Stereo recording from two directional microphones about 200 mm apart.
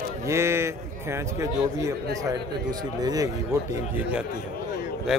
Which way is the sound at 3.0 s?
20° right (ahead or behind).